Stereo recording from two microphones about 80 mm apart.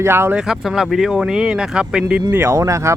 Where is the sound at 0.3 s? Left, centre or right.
Centre.